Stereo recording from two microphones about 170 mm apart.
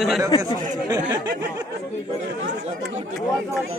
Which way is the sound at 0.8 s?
20° right (ahead or behind).